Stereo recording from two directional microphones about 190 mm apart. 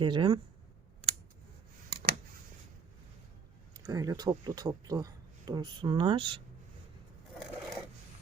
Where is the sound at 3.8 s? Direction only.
20° right (ahead or behind).